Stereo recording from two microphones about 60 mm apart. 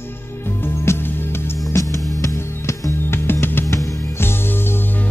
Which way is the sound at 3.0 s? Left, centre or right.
Left.